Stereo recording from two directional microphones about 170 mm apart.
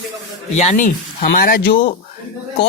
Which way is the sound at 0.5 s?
45° left (ahead or behind).